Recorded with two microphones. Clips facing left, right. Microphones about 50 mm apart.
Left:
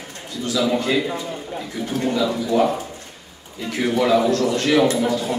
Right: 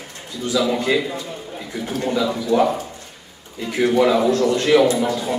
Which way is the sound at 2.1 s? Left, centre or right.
Centre.